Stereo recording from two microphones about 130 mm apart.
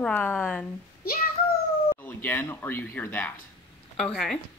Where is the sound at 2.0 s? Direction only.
15° left (ahead or behind).